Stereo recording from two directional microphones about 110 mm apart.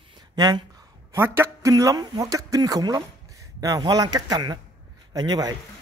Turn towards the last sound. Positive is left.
turn(degrees=-40)  # may be behind; listen again after turning